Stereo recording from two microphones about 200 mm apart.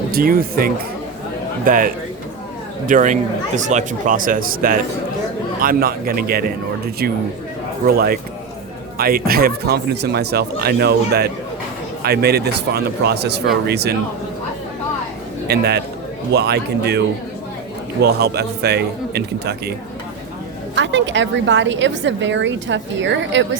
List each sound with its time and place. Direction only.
0.1 s a woman's voice: 45° right (ahead or behind)
15.4 s a woman's voice: 55° right (ahead or behind)
18.0 s a woman's voice: 55° right (ahead or behind)
20.7 s a woman's voice: 65° right (ahead or behind)